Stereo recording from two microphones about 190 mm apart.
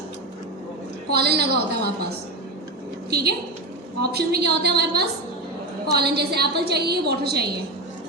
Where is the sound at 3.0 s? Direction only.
60° right (ahead or behind).